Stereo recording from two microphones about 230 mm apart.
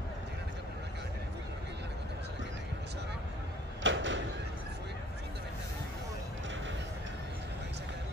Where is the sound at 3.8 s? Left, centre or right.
Right.